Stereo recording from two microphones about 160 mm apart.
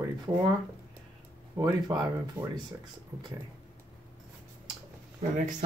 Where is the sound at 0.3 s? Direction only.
25° right (ahead or behind).